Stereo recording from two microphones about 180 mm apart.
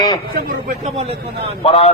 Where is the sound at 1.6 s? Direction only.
35° left (ahead or behind).